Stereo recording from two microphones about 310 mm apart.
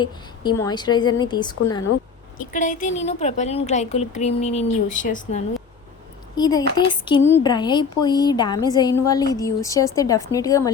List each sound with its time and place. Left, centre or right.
0.0 s a woman's voice: centre
2.5 s a woman's voice: left
6.3 s a woman's voice: centre